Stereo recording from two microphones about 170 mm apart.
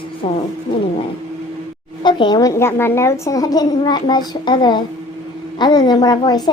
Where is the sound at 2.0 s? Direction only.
25° left (ahead or behind).